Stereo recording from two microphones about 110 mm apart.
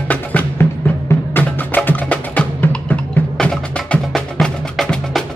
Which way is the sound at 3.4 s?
5° left (ahead or behind).